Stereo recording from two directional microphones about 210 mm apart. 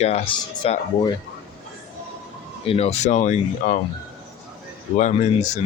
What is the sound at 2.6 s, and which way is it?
Speech, 30° left (ahead or behind).